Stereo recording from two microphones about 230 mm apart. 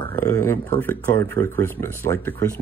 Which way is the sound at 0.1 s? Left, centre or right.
Centre.